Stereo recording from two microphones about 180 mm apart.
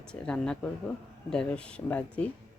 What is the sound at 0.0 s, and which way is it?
Speech, 5° left (ahead or behind).